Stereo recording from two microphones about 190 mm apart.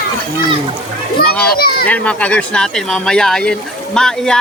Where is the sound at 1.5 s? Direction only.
55° left (ahead or behind).